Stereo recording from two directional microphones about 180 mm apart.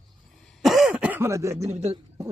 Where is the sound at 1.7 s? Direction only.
35° right (ahead or behind).